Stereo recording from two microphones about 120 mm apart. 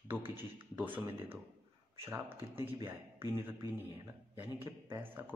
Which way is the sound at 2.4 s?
20° right (ahead or behind).